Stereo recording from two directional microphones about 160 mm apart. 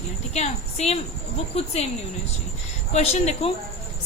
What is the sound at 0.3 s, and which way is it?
A woman's voice, 40° left (ahead or behind).